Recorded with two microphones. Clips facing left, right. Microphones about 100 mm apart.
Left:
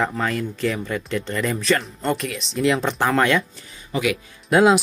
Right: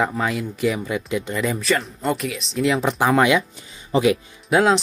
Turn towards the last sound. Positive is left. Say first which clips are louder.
# left 2 dB
turn(degrees=0)  # may be behind; listen again after turning